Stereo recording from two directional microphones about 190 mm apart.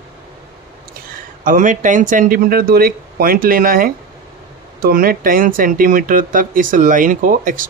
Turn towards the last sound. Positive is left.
turn(degrees=-45)  # may be behind; listen again after turning